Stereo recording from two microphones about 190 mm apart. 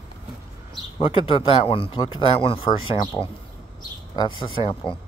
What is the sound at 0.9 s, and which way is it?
Speech, 30° left (ahead or behind).